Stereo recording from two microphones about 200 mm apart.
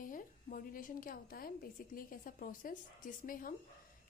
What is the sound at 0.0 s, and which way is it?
A woman's voice, 45° left (ahead or behind).